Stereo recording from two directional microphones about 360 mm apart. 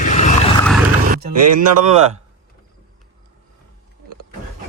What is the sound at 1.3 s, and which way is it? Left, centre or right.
Speech, right.